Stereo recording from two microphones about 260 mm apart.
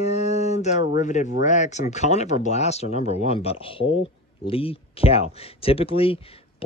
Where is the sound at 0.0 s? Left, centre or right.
Left.